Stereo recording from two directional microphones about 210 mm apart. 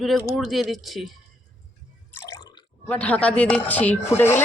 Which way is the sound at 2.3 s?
20° left (ahead or behind).